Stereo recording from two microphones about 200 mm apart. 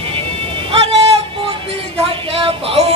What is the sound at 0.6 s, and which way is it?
Music, 30° right (ahead or behind).